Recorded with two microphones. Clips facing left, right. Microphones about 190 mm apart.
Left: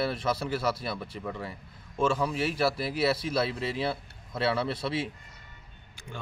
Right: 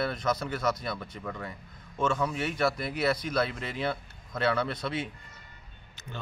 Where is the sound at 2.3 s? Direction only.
30° left (ahead or behind).